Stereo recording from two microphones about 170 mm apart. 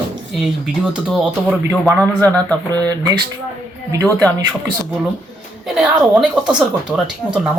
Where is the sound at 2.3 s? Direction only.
10° left (ahead or behind).